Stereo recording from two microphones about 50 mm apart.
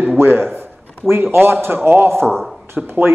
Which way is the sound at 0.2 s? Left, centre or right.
Right.